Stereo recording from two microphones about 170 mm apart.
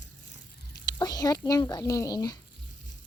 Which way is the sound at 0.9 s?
25° left (ahead or behind).